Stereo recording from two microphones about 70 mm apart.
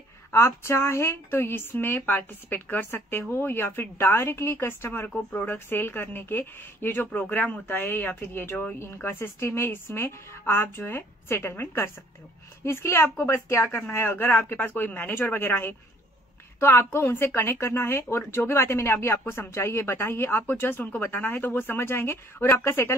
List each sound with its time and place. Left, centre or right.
0.3 s a woman's voice: left
5.1 s speech: centre
5.5 s a woman's voice: left